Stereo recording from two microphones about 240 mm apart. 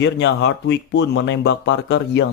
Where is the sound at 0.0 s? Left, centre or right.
Left.